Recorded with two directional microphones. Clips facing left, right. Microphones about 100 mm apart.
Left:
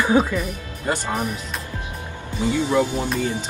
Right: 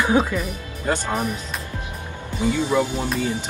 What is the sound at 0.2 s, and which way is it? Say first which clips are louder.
Speech: left 1 dB; centre (ahead or behind).